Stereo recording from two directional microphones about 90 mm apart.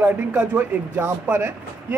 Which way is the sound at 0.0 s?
20° right (ahead or behind).